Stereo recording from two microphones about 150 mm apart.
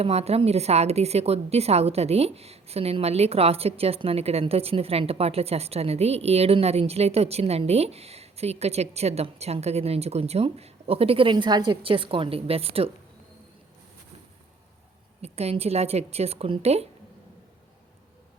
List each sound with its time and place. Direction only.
0.0 s a woman's voice: 45° right (ahead or behind)
15.2 s a woman's voice: 45° right (ahead or behind)